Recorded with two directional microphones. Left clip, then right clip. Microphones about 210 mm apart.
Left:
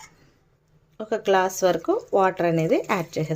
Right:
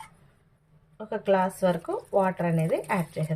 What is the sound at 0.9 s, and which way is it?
Speech, 50° left (ahead or behind).